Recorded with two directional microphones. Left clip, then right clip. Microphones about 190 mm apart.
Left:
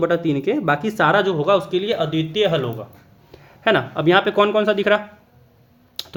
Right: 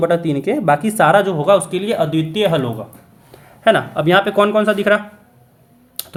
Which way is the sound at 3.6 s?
20° left (ahead or behind).